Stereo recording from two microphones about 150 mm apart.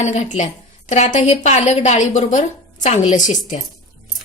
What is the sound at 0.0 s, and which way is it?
A woman's voice, 50° left (ahead or behind).